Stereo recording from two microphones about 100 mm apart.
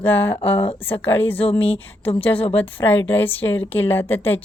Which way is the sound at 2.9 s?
20° left (ahead or behind).